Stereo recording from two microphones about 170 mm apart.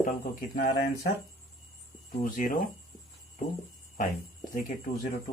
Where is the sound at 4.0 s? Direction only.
50° left (ahead or behind).